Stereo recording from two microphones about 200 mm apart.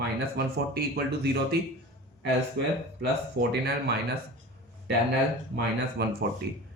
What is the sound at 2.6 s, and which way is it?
Speech, 50° right (ahead or behind).